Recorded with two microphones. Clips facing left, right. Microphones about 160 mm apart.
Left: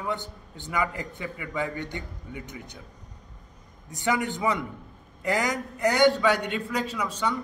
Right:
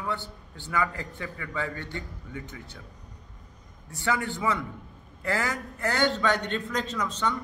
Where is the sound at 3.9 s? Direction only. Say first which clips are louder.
Left 2 dB; 15° left (ahead or behind).